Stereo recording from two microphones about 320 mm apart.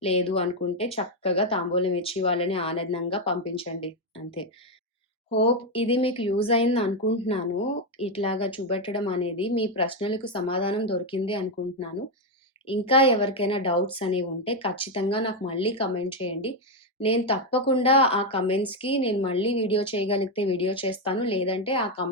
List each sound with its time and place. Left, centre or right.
0.0 s speech: centre
5.4 s speech: centre
12.9 s speech: centre